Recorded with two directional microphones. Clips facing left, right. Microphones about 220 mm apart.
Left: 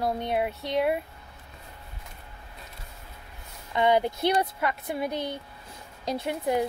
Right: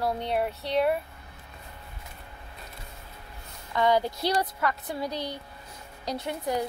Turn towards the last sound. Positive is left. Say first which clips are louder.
# left 3 dB
turn(degrees=20)  # may be behind; listen again after turning